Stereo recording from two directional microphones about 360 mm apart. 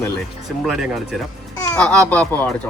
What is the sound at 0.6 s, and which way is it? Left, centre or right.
Speech, centre.